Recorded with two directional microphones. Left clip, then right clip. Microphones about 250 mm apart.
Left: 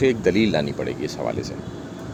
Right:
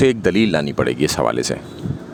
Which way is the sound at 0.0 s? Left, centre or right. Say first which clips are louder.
Right 3 dB; right.